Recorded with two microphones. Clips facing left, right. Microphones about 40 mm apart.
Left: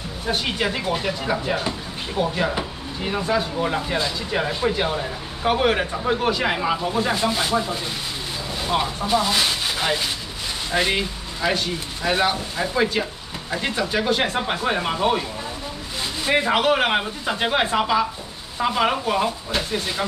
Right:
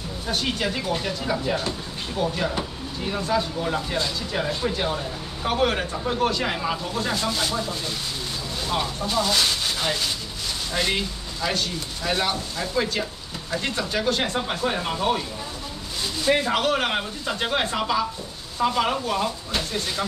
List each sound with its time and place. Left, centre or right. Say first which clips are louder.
0.3 s speech: left 2 dB; centre
16.3 s speech: left 3 dB; centre